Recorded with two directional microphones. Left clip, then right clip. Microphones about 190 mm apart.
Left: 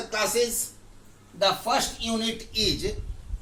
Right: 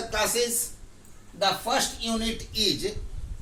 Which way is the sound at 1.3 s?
Centre (ahead or behind).